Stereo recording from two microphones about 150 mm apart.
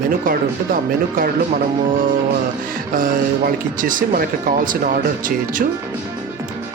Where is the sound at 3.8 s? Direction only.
65° right (ahead or behind).